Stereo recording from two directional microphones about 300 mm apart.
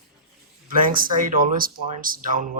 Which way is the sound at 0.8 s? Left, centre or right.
Right.